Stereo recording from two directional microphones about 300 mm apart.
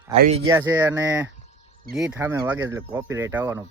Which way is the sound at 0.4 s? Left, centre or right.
Centre.